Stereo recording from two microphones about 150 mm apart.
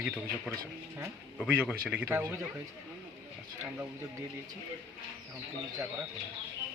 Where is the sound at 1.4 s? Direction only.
10° right (ahead or behind).